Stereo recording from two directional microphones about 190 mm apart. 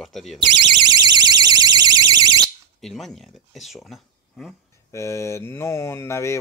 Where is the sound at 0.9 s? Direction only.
20° right (ahead or behind).